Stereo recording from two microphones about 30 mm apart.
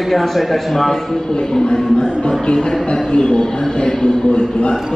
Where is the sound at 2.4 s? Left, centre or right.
Left.